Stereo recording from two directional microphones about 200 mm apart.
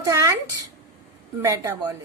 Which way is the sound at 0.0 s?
15° right (ahead or behind).